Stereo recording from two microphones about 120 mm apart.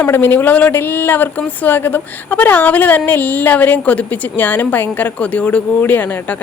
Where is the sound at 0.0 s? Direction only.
15° left (ahead or behind).